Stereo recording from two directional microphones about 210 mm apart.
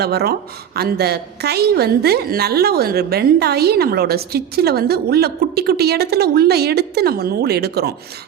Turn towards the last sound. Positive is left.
turn(degrees=-50)  # may be behind; listen again after turning